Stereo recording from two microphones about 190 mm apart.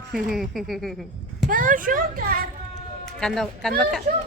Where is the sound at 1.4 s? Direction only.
45° right (ahead or behind).